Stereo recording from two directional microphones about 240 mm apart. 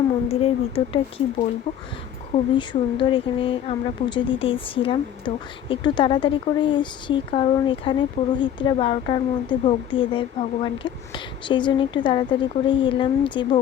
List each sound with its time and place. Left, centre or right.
0.3 s speech: left
2.3 s speech: left